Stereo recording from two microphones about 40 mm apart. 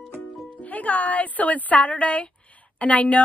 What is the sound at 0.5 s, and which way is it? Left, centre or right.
Speech, left.